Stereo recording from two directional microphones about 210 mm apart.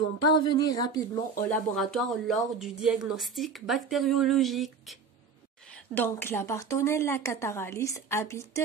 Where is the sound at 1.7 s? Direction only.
Centre (ahead or behind).